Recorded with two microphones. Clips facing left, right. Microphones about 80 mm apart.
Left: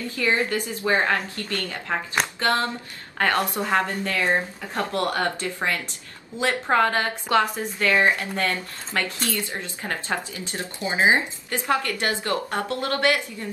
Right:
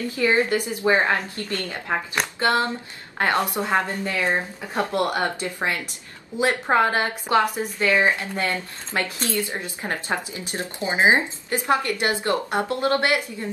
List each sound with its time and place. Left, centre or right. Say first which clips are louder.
0.1 s a woman's voice: right 3 dB; right
3.2 s a woman's voice: right 1 dB; centre